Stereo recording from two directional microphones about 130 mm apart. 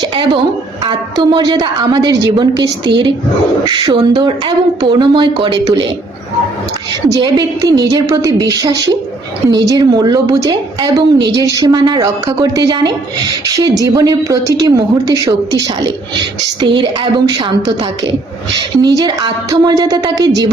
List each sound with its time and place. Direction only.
0.9 s a woman's voice: 35° right (ahead or behind)
7.1 s a woman's voice: 25° right (ahead or behind)